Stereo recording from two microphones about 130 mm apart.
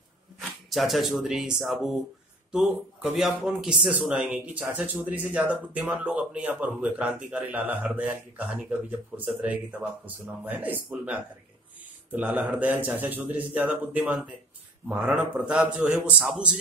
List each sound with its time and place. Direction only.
0.4 s speech: centre (ahead or behind)